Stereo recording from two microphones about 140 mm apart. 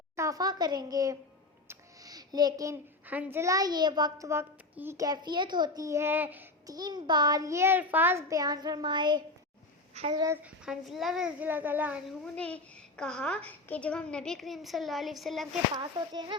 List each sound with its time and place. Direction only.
0.2 s a child's voice: 25° right (ahead or behind)
1.6 s music: 20° right (ahead or behind)
3.1 s a child's voice: 15° right (ahead or behind)
6.7 s a child's voice: 30° right (ahead or behind)
10.4 s a child's voice: 5° right (ahead or behind)
12.0 s a child's voice: 5° left (ahead or behind)
15.7 s a child's voice: 30° right (ahead or behind)